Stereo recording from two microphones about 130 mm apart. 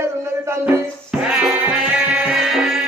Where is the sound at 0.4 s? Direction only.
20° right (ahead or behind).